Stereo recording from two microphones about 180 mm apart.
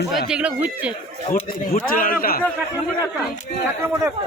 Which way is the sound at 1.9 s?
50° left (ahead or behind).